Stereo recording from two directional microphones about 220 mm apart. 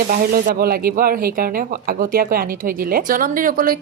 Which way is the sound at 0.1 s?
40° right (ahead or behind).